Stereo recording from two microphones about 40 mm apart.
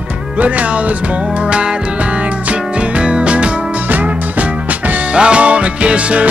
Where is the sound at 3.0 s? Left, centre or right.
Right.